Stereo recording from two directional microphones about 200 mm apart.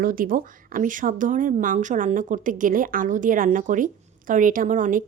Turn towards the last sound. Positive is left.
turn(degrees=-40)  # may be behind; listen again after turning